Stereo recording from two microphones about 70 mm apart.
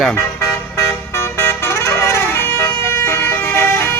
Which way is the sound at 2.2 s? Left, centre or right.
Left.